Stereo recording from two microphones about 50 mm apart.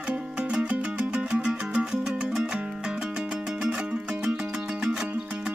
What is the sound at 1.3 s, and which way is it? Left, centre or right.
Music, centre.